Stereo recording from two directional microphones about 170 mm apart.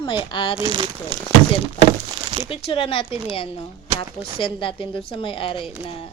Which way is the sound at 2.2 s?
30° right (ahead or behind).